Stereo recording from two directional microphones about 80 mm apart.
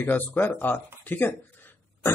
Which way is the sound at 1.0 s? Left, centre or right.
Left.